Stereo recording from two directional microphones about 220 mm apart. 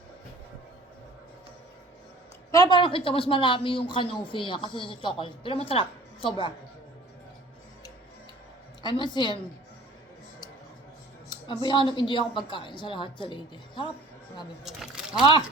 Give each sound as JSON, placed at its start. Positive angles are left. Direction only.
{"t": 2.5, "sound": "speech", "side_deg": 15}
{"t": 8.8, "sound": "speech", "side_deg": 20}
{"t": 11.3, "sound": "a woman's voice", "side_deg": 20}
{"t": 14.6, "sound": "speech", "side_deg": 0}